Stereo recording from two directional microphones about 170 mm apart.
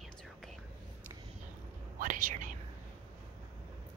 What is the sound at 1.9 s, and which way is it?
Whispering, 55° right (ahead or behind).